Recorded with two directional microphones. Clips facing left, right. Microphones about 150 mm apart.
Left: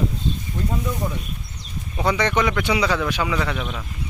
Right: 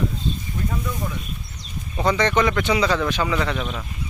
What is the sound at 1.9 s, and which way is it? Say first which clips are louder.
A man's voice: right 1 dB; 10° left (ahead or behind).